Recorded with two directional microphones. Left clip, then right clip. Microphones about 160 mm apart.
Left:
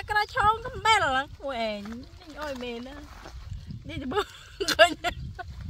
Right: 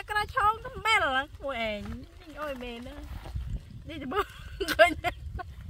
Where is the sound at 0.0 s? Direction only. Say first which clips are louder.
Left 3 dB; 15° left (ahead or behind).